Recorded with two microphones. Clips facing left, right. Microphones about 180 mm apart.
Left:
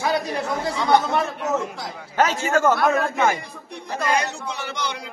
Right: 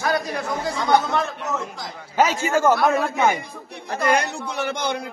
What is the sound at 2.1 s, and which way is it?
Speech, 10° right (ahead or behind).